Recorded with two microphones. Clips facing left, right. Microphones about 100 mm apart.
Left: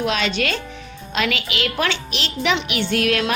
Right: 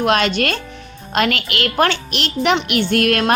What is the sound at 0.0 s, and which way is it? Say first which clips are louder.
A woman's voice: right 5 dB; 55° right (ahead or behind).